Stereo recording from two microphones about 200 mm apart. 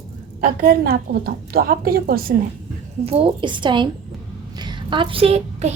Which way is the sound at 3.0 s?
25° right (ahead or behind).